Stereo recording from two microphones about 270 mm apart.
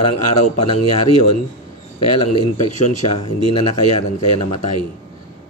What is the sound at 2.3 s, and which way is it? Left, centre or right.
Speech, left.